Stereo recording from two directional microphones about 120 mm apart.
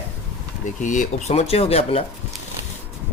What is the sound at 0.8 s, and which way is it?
A man's voice, 90° left.